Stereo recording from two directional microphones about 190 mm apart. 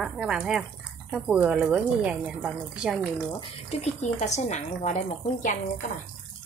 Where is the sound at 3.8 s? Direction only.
40° left (ahead or behind).